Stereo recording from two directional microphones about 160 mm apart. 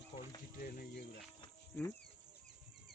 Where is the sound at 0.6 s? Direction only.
60° left (ahead or behind).